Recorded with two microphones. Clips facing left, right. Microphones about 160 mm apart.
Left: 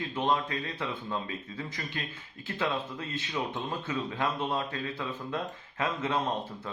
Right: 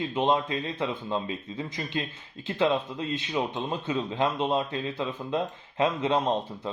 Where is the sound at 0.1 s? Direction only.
20° right (ahead or behind).